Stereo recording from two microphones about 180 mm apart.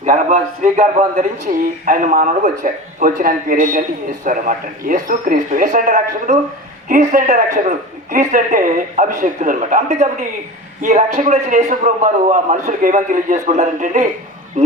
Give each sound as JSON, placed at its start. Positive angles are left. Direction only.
{"t": 0.0, "sound": "a man's voice", "side_deg": -40}